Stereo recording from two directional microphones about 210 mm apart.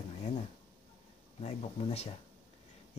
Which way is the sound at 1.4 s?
30° left (ahead or behind).